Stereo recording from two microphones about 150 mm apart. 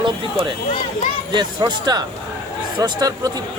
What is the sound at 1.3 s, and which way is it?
Speech, 25° right (ahead or behind).